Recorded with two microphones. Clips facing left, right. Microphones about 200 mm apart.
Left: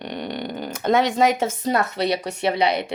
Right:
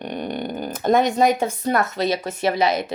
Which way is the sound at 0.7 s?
85° left.